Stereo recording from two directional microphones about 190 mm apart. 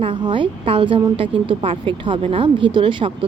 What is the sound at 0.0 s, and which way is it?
Speech, 25° right (ahead or behind).